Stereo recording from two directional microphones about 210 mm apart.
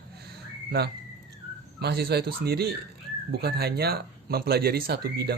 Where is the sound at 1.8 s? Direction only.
50° right (ahead or behind).